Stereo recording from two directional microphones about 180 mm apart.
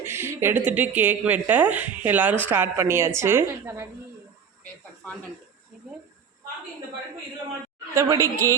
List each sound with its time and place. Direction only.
0.0 s speech: 15° right (ahead or behind)
7.9 s speech: 15° right (ahead or behind)